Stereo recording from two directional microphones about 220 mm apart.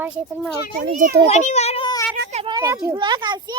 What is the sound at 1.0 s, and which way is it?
Speech, 40° right (ahead or behind).